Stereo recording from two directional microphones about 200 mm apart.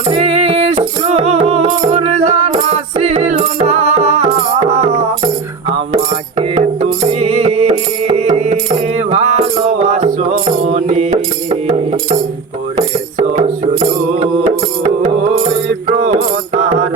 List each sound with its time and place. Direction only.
0.1 s music: 30° right (ahead or behind)
6.5 s music: 30° right (ahead or behind)
12.7 s music: 35° right (ahead or behind)
15.9 s mantra: 30° right (ahead or behind)